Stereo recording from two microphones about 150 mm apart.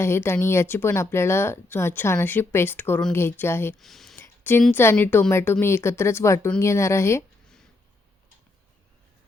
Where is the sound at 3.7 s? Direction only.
Centre (ahead or behind).